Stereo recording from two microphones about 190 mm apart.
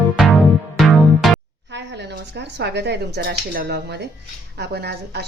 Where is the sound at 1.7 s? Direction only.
65° right (ahead or behind).